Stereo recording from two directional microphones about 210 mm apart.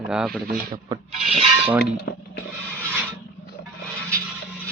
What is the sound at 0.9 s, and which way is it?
Rub, 20° right (ahead or behind).